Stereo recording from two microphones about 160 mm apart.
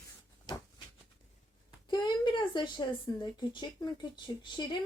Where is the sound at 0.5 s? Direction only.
25° left (ahead or behind).